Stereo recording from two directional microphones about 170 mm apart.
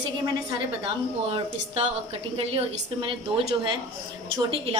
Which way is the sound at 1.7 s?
35° right (ahead or behind).